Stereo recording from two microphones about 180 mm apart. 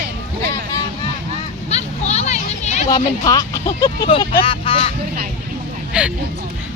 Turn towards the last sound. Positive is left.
turn(degrees=-5)  # may be behind; listen again after turning